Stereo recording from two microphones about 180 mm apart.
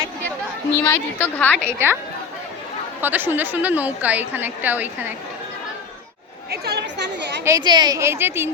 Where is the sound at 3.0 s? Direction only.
10° right (ahead or behind).